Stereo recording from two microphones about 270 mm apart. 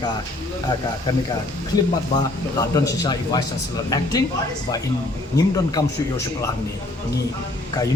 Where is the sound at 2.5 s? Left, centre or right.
Centre.